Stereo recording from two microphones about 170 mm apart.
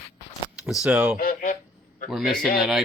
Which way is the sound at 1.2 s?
55° left (ahead or behind).